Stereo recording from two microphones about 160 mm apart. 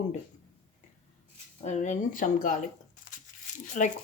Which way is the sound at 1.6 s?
50° left (ahead or behind).